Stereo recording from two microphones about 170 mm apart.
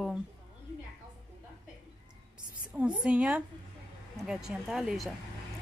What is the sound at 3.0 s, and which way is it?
Speech, 5° right (ahead or behind).